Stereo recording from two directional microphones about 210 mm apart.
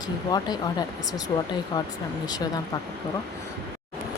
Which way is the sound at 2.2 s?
20° left (ahead or behind).